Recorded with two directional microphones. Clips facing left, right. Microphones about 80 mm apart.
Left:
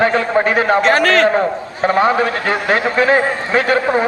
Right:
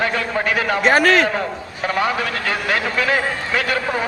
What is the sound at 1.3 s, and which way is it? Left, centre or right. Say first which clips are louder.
A man's voice: left 7 dB; left.